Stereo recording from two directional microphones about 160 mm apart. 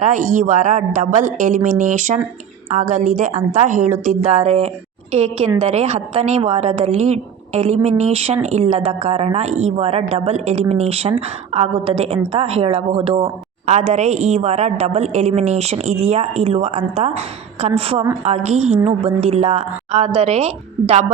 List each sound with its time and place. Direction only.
0.0 s a woman's voice: 50° right (ahead or behind)